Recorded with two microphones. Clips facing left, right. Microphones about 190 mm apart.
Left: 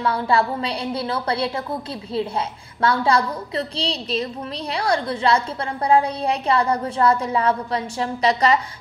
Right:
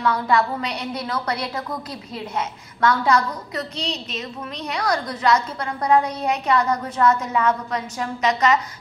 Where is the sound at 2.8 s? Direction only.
30° left (ahead or behind).